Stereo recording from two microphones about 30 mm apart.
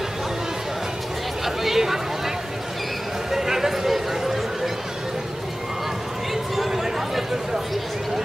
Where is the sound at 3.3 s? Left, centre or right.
Centre.